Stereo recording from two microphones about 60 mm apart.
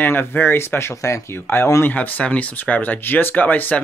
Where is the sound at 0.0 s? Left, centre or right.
Left.